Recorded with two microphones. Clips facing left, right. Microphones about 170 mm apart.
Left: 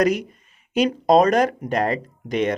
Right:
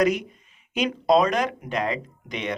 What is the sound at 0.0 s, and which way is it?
Speech, 45° left (ahead or behind).